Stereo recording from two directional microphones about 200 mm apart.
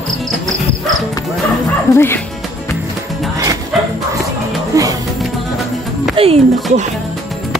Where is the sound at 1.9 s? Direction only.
10° left (ahead or behind).